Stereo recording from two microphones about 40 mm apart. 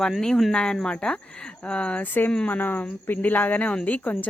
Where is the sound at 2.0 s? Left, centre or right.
Left.